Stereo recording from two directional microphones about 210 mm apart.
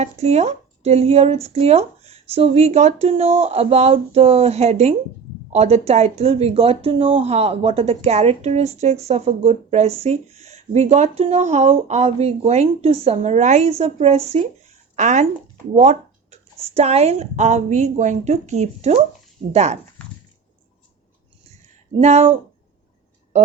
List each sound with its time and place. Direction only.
0.0 s speech: 30° right (ahead or behind)
15.7 s a sound: 35° right (ahead or behind)
16.6 s speech: 30° right (ahead or behind)
21.9 s speech: 30° right (ahead or behind)